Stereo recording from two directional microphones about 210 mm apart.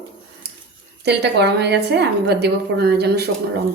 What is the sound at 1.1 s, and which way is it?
A woman's voice, 55° right (ahead or behind).